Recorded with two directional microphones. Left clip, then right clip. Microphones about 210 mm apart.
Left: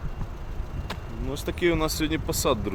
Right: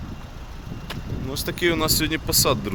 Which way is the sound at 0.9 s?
10° right (ahead or behind).